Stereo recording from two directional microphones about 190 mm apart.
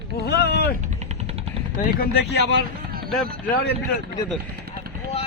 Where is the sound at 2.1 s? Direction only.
60° left (ahead or behind).